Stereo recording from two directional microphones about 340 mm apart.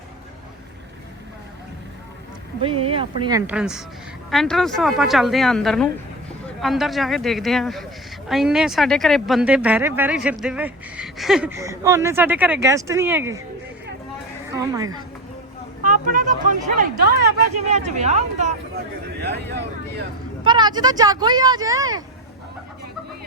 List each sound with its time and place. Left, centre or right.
2.6 s speech: centre
14.5 s speech: centre
15.8 s speech: right
20.4 s speech: centre